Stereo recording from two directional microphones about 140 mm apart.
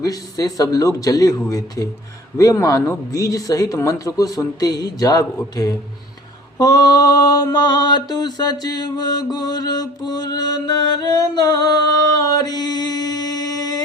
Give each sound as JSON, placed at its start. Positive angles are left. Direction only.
{"t": 0.0, "sound": "mantra", "side_deg": 25}